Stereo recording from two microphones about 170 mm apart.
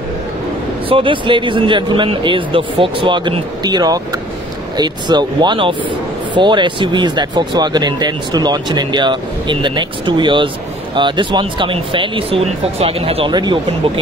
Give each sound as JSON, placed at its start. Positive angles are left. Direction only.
{"t": 0.8, "sound": "speech", "side_deg": -30}